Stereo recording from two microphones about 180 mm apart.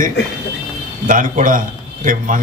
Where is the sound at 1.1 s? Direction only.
45° right (ahead or behind).